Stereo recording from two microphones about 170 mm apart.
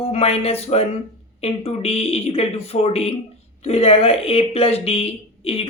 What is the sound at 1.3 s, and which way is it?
Speech, 35° left (ahead or behind).